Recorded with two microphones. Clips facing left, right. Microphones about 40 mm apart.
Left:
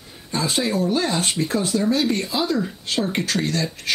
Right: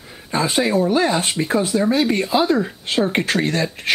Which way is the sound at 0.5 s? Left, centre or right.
Centre.